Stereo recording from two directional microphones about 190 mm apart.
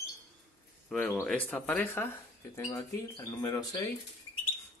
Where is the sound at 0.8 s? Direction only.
10° left (ahead or behind).